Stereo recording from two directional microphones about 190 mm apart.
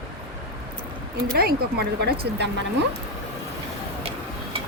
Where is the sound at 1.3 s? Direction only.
55° right (ahead or behind).